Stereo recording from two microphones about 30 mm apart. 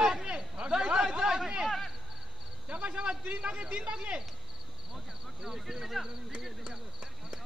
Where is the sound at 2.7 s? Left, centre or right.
Right.